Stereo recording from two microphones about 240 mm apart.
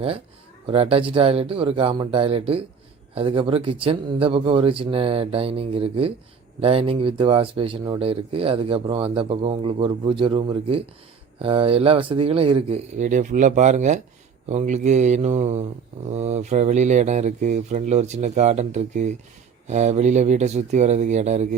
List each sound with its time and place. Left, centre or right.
0.7 s speech: right